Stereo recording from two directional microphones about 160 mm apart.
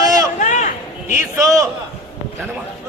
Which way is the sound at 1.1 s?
20° right (ahead or behind).